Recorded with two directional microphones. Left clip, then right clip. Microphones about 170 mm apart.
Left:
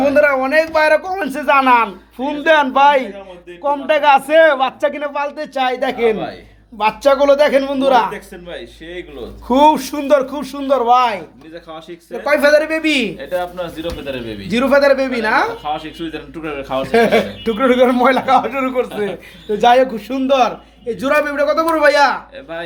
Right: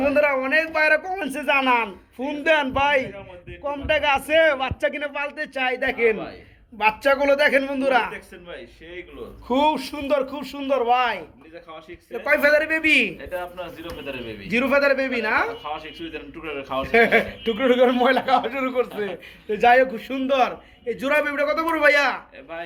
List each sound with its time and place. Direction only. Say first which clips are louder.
0.0 s a man's voice: left 7 dB; 10° left (ahead or behind)
8.4 s a man's voice: left 8 dB; 50° left (ahead or behind)
9.5 s speech: left 9 dB; 30° left (ahead or behind)
10.4 s a man's voice: left 7 dB; centre (ahead or behind)
10.7 s a man's voice: left 7 dB; 20° left (ahead or behind)
13.1 s a man's voice: left 9 dB; 50° left (ahead or behind)
14.4 s a man's voice: left 7 dB; 10° left (ahead or behind)
15.6 s a man's voice: left 9 dB; 50° left (ahead or behind)
16.8 s a man's voice: left 4 dB; 5° left (ahead or behind)